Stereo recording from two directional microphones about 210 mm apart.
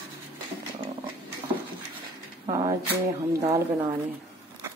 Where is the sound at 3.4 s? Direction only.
15° right (ahead or behind).